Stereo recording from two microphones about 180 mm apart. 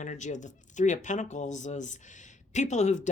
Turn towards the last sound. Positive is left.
turn(degrees=40)  # may be behind; listen again after turning